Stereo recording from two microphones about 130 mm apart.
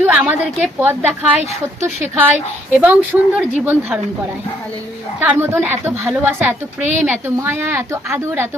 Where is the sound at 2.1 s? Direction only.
15° right (ahead or behind).